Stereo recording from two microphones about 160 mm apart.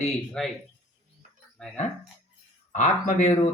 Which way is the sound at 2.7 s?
50° left (ahead or behind).